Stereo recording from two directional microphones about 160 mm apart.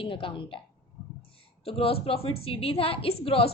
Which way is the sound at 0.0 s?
35° left (ahead or behind).